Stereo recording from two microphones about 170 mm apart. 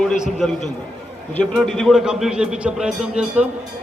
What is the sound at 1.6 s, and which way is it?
A man's voice, centre (ahead or behind).